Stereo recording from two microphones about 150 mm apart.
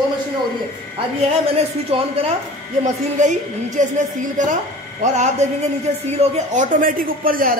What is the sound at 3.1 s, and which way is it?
Speech, 55° right (ahead or behind).